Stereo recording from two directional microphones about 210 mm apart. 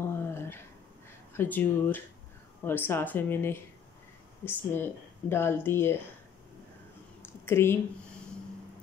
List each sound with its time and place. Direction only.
0.0 s a sound: 10° left (ahead or behind)
1.3 s speech: 10° left (ahead or behind)
7.4 s speech: 10° left (ahead or behind)